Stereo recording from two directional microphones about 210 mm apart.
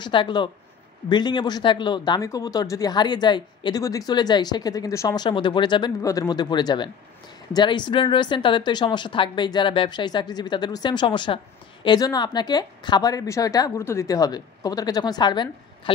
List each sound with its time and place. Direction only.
0.0 s a woman's voice: 20° left (ahead or behind)